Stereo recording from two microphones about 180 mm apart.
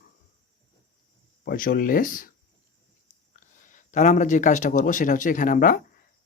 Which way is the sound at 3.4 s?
45° left (ahead or behind).